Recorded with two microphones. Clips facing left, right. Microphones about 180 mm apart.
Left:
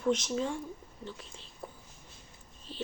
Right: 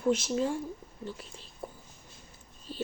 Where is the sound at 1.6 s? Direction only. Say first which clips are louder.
Right 3 dB; 5° right (ahead or behind).